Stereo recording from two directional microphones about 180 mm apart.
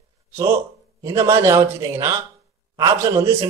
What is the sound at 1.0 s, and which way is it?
A man's voice, 15° right (ahead or behind).